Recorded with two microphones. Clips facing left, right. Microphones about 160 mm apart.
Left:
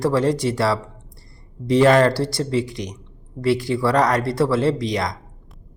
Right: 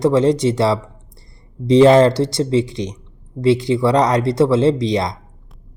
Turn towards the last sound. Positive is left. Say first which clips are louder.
# right 4 dB
turn(degrees=-25)  # may be behind; listen again after turning